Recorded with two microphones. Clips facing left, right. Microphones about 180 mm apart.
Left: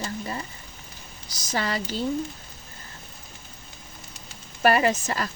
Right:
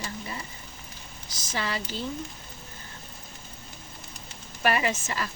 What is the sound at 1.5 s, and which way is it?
Speech, 40° left (ahead or behind).